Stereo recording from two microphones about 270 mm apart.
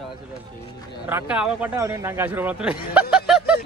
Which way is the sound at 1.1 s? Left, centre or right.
Centre.